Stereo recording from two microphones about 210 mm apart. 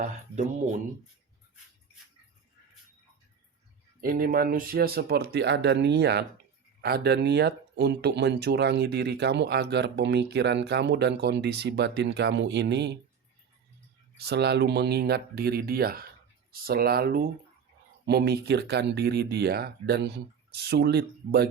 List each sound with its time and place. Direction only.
0.0 s speech: 35° right (ahead or behind)
4.0 s speech: 45° right (ahead or behind)
14.2 s speech: 50° right (ahead or behind)